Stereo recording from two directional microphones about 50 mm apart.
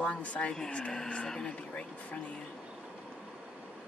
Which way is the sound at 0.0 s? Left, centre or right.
Left.